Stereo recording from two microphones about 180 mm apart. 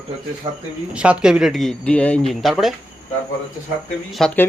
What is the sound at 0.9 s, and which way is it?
Speech, 5° right (ahead or behind).